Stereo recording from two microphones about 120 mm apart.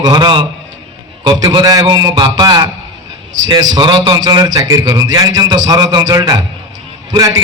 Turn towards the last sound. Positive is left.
turn(degrees=-30)  # may be behind; listen again after turning